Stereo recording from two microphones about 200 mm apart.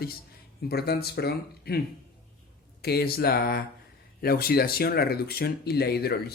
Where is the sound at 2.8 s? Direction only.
50° left (ahead or behind).